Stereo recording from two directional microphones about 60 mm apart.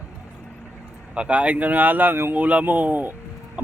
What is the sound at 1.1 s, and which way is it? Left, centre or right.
Speech, centre.